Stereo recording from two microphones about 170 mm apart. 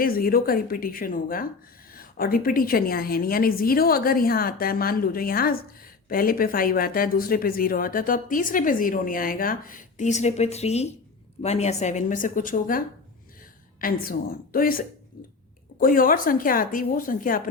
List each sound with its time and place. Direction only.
0.0 s speech: 60° left (ahead or behind)
13.8 s speech: 60° left (ahead or behind)